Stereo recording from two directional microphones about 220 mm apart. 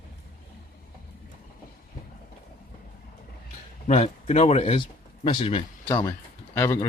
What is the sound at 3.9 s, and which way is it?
Speech, 30° left (ahead or behind).